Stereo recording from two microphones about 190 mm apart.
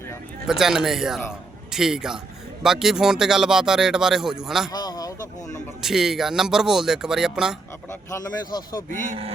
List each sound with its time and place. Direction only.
0.4 s a man's voice: 5° right (ahead or behind)
4.7 s a sound: 20° left (ahead or behind)
5.8 s speech: centre (ahead or behind)
7.9 s speech: 15° left (ahead or behind)